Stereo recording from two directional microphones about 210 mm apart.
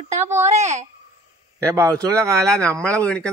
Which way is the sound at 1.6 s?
15° right (ahead or behind).